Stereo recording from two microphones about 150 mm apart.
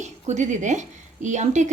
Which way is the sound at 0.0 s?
50° right (ahead or behind).